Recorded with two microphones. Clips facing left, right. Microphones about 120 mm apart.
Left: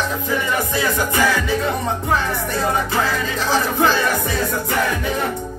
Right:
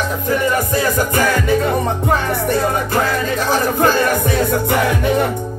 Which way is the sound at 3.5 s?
50° right (ahead or behind).